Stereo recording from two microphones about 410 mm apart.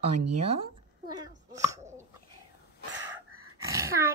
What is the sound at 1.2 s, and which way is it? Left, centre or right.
Plop, centre.